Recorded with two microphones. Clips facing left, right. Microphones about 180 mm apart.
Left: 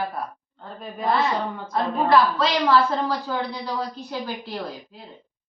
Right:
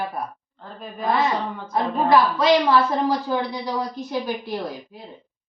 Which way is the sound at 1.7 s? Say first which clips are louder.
Right 1 dB; 15° right (ahead or behind).